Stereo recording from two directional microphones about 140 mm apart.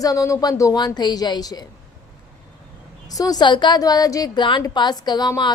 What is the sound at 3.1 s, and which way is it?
A woman's voice, 25° left (ahead or behind).